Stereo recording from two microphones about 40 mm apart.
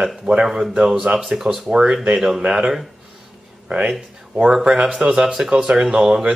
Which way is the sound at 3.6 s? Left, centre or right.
Right.